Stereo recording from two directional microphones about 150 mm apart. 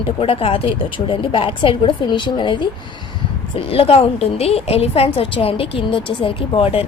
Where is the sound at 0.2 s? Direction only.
40° left (ahead or behind).